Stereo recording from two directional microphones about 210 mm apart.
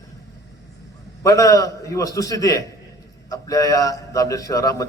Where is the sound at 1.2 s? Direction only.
15° left (ahead or behind).